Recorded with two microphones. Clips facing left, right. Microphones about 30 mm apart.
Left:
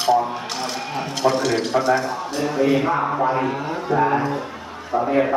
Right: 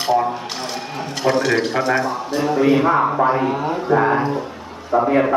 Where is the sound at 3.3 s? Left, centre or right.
Centre.